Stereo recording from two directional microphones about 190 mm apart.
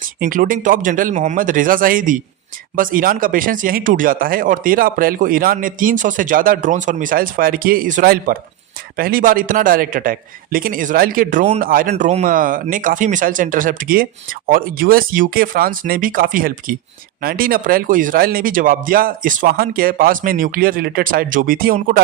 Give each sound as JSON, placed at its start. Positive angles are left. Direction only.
{"t": 0.0, "sound": "speech", "side_deg": -45}